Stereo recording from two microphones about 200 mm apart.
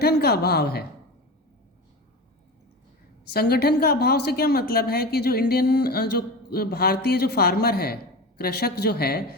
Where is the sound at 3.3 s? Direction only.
50° left (ahead or behind).